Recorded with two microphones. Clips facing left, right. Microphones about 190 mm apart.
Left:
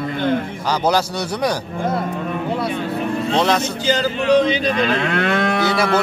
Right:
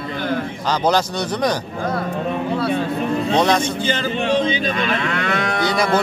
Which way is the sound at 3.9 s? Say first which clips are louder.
Left 6 dB; 40° left (ahead or behind).